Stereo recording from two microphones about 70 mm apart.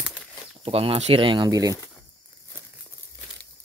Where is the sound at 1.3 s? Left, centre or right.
Right.